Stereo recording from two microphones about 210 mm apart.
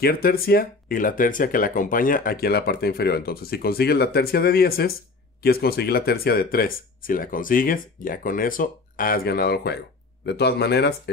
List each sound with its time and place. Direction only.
0.0 s speech: 45° left (ahead or behind)